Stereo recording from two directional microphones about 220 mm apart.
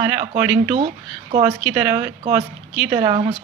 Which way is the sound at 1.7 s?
10° right (ahead or behind).